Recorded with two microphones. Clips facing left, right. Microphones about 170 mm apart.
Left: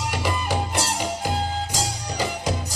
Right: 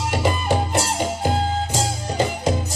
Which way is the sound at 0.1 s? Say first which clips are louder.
Right 6 dB; 25° right (ahead or behind).